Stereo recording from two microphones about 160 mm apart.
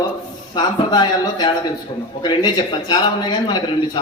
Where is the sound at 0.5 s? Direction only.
25° left (ahead or behind).